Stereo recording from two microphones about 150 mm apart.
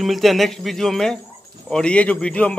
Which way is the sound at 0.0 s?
Centre (ahead or behind).